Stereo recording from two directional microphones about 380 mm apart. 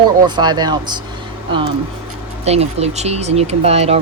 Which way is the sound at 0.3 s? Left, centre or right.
Centre.